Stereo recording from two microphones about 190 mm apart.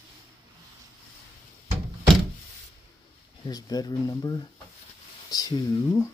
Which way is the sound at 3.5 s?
20° left (ahead or behind).